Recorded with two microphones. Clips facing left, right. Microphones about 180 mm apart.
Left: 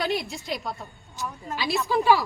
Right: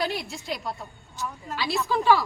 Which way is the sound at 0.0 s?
Centre (ahead or behind).